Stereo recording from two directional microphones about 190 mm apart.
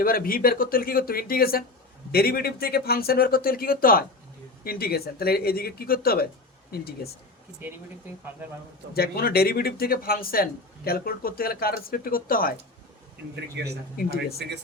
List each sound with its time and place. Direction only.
0.0 s speech: 50° left (ahead or behind)
8.9 s speech: 55° left (ahead or behind)
13.6 s speech: 60° right (ahead or behind)
13.9 s speech: 50° left (ahead or behind)